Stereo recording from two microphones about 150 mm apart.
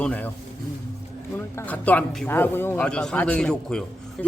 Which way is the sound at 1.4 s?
15° left (ahead or behind).